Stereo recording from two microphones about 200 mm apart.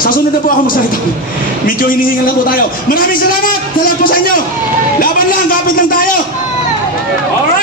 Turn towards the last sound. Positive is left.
turn(degrees=45)  # may be behind; listen again after turning